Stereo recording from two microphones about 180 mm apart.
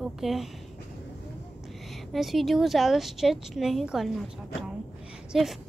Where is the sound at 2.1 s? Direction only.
Centre (ahead or behind).